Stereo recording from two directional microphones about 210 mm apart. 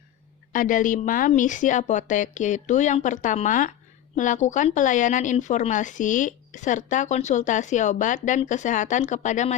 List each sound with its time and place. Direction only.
0.5 s speech: 40° left (ahead or behind)